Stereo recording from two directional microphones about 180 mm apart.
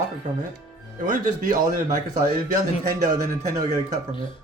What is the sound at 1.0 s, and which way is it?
Speech, 45° right (ahead or behind).